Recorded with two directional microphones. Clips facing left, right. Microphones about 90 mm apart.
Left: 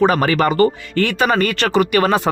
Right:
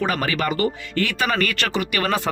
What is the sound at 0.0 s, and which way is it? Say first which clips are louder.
Speech: left 8 dB; 35° left (ahead or behind).